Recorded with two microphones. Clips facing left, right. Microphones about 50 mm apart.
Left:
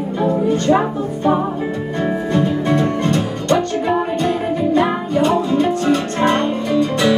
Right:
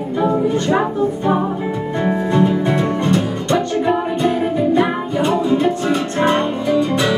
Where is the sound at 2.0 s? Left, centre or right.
Centre.